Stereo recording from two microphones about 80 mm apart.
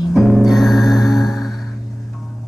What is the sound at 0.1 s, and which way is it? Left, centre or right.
Music, centre.